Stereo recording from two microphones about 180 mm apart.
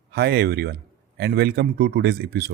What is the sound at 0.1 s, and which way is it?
Speech, 60° right (ahead or behind).